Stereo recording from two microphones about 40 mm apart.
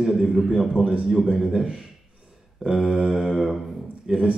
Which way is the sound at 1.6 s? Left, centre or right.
Centre.